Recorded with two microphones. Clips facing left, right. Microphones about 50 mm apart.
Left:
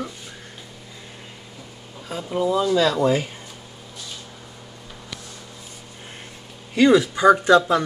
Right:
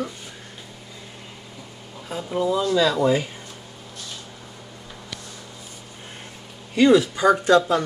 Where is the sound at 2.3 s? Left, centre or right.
Centre.